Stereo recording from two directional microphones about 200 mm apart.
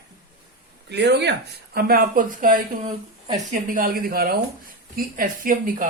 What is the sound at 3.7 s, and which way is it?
Speech, 45° right (ahead or behind).